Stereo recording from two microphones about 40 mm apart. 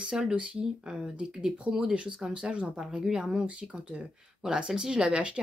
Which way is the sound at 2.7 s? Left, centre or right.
Centre.